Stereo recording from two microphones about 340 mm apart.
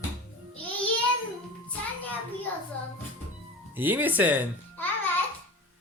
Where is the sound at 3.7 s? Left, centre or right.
Centre.